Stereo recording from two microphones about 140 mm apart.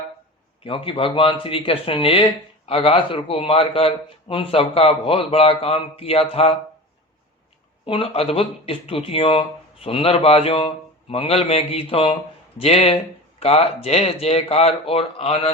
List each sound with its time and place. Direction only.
0.6 s speech: 40° left (ahead or behind)
7.9 s speech: 40° left (ahead or behind)